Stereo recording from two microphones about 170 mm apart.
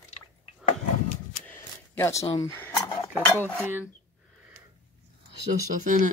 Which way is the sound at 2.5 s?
15° left (ahead or behind).